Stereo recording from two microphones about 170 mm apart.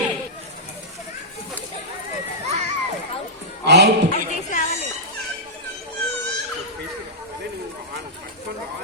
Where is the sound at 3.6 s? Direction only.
85° right.